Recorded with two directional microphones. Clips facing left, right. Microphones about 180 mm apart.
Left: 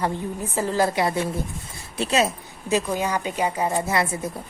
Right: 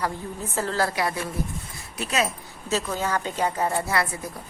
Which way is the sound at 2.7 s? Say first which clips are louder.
Left 3 dB; 15° left (ahead or behind).